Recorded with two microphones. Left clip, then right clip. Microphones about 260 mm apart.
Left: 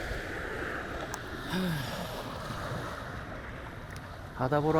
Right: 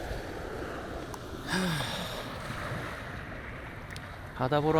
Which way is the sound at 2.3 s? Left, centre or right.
Centre.